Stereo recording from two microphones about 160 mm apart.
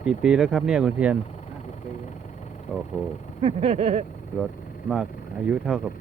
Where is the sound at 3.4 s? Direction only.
40° right (ahead or behind).